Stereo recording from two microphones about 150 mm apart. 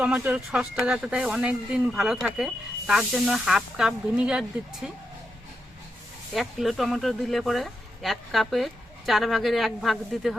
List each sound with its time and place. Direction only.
0.0 s speech: 5° right (ahead or behind)
6.3 s speech: centre (ahead or behind)